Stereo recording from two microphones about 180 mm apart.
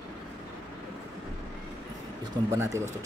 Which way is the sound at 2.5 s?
15° right (ahead or behind).